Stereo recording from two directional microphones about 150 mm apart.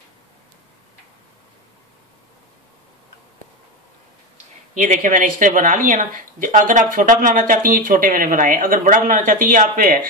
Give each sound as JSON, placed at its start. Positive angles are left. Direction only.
{"t": 4.7, "sound": "speech", "side_deg": -55}